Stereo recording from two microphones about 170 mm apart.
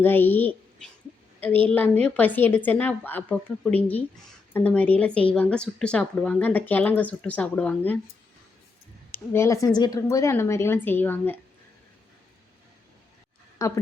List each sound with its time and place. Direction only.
0.0 s a woman's voice: 10° left (ahead or behind)
9.1 s speech: 15° left (ahead or behind)
13.6 s a woman's voice: 20° left (ahead or behind)